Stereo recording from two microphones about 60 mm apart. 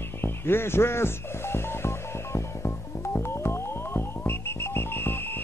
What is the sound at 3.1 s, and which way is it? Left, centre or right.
Music, left.